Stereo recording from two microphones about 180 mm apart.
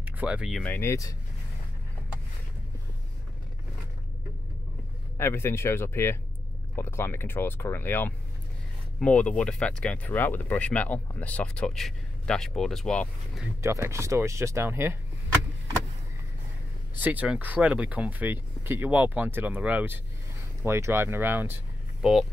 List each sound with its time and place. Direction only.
0.0 s speech: 5° right (ahead or behind)
0.7 s speech: 15° left (ahead or behind)
5.1 s speech: 15° left (ahead or behind)
13.6 s speech: 15° right (ahead or behind)
17.0 s speech: 10° right (ahead or behind)